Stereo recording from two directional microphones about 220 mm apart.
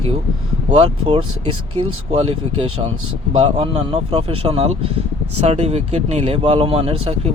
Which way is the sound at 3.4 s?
30° right (ahead or behind).